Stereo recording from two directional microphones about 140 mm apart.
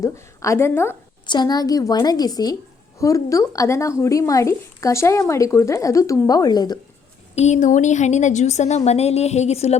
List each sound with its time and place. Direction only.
0.0 s speech: 20° left (ahead or behind)
1.3 s speech: 30° left (ahead or behind)
7.3 s a woman's voice: 55° left (ahead or behind)